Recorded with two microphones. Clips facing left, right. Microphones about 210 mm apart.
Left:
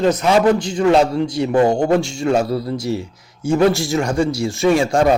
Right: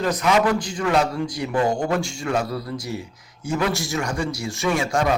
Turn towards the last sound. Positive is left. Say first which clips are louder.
# left 7 dB
turn(degrees=30)  # may be behind; listen again after turning